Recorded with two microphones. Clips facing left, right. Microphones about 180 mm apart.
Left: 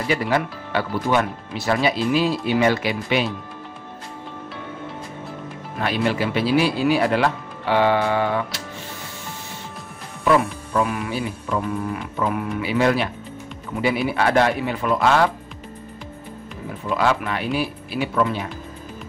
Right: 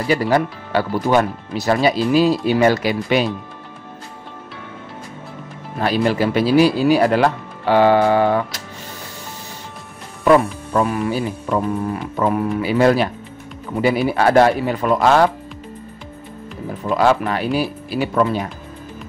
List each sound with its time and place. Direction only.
0.1 s speech: 40° right (ahead or behind)
5.8 s speech: 40° right (ahead or behind)
10.2 s speech: 40° right (ahead or behind)
16.9 s speech: 40° right (ahead or behind)